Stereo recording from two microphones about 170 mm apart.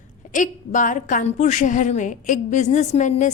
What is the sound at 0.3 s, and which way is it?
A woman's voice, 50° left (ahead or behind).